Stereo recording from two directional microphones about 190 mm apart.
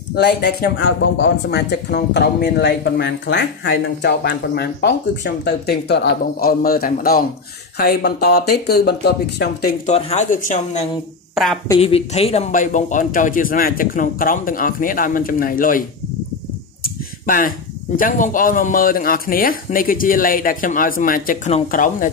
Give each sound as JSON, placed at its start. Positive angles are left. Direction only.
{"t": 0.1, "sound": "speech", "side_deg": 60}
{"t": 9.8, "sound": "speech", "side_deg": 35}
{"t": 11.8, "sound": "speech", "side_deg": 30}
{"t": 16.8, "sound": "speech", "side_deg": 45}